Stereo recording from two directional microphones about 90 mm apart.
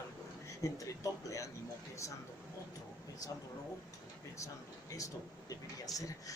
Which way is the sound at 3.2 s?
40° left (ahead or behind).